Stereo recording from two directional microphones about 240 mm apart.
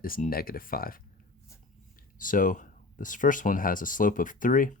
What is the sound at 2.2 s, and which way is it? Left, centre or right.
Speech, left.